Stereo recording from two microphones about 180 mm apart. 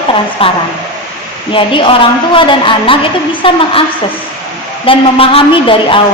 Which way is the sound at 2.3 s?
30° left (ahead or behind).